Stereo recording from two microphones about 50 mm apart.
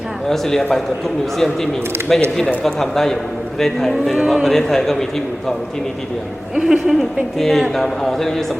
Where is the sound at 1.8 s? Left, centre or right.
Right.